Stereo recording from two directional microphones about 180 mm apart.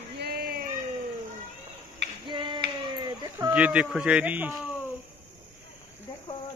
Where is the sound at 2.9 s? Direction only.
25° right (ahead or behind).